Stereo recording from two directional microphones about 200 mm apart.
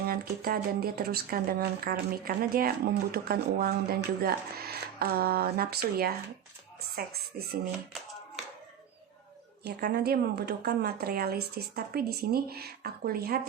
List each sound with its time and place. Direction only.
0.0 s speech: 50° right (ahead or behind)
9.6 s speech: 55° right (ahead or behind)